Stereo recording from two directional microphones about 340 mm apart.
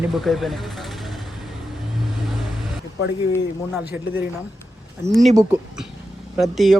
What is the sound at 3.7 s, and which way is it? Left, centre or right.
Speech, centre.